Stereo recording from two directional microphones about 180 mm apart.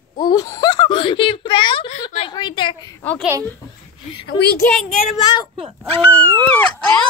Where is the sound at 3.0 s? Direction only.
5° left (ahead or behind).